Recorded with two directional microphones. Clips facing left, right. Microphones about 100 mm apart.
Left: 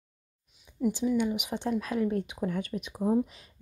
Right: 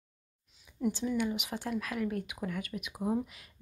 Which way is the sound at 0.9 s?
15° left (ahead or behind).